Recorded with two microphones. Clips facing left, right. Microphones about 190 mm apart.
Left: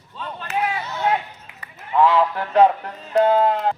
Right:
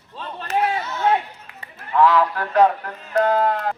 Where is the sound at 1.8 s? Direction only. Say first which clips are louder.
Even; 20° left (ahead or behind).